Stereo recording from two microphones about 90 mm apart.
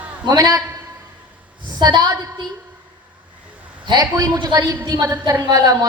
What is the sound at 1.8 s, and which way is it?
Speech, 50° right (ahead or behind).